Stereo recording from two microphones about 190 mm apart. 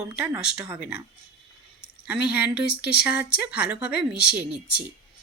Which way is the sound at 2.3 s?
5° right (ahead or behind).